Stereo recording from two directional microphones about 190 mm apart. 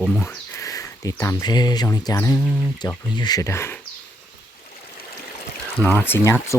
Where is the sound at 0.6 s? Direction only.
20° left (ahead or behind).